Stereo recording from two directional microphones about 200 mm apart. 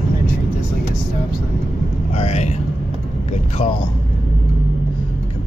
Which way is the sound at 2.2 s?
35° left (ahead or behind).